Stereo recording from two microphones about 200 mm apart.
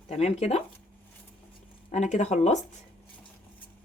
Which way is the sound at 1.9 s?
35° left (ahead or behind).